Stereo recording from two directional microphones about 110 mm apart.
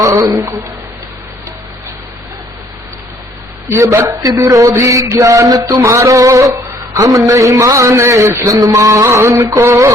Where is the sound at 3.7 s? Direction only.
30° right (ahead or behind).